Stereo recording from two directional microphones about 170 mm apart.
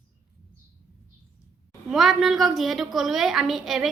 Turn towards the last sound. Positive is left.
turn(degrees=0)  # may be behind; listen again after turning